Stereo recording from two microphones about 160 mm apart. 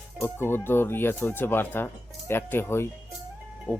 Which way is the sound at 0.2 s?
15° left (ahead or behind).